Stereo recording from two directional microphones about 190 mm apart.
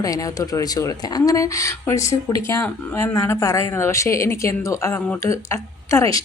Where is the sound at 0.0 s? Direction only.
20° left (ahead or behind).